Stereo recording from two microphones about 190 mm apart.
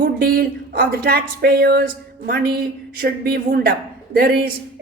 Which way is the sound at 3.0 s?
55° right (ahead or behind).